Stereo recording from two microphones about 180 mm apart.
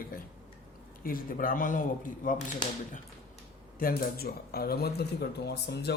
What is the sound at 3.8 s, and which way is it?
Speech, 55° left (ahead or behind).